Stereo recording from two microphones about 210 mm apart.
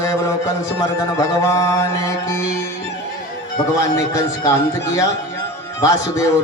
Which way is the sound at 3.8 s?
15° left (ahead or behind).